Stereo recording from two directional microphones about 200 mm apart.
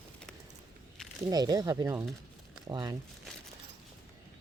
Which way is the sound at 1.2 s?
20° right (ahead or behind).